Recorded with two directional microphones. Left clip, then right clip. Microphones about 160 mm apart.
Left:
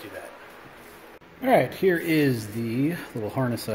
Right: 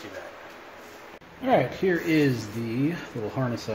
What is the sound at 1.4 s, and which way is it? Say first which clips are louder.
Speech: left 2 dB; 50° left (ahead or behind).